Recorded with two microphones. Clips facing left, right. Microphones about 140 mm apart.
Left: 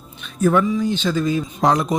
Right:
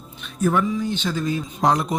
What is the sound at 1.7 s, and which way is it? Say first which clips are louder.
Speech: left 2 dB; 90° left.